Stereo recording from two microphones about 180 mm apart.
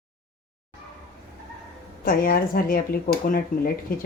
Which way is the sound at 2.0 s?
55° left (ahead or behind).